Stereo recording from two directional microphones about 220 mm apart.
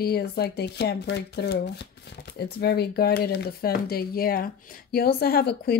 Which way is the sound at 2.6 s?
45° left (ahead or behind).